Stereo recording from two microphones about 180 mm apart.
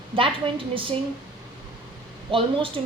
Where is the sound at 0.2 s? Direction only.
30° right (ahead or behind).